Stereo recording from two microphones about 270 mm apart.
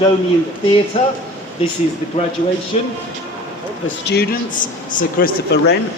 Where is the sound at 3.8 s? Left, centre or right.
Left.